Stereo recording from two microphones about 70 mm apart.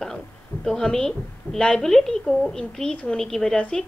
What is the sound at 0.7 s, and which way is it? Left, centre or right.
A woman's voice, centre.